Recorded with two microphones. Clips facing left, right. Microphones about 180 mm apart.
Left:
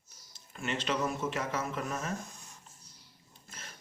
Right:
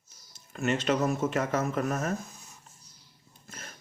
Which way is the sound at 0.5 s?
45° right (ahead or behind).